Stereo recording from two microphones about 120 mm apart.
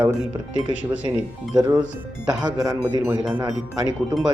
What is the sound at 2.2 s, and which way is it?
Speech, 30° right (ahead or behind).